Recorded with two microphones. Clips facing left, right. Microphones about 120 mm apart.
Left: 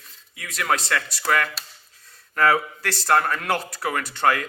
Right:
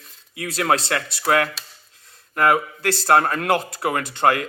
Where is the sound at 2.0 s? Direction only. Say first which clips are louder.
Right 2 dB; 20° right (ahead or behind).